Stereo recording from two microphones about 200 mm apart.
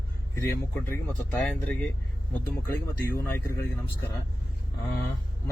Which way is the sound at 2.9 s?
50° left (ahead or behind).